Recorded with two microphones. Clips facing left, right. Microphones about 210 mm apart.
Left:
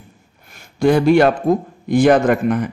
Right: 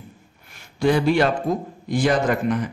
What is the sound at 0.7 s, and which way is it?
A man's voice, 50° left (ahead or behind).